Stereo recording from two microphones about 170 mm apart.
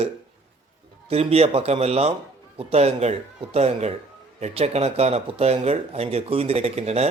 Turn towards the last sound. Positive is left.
turn(degrees=-40)  # may be behind; listen again after turning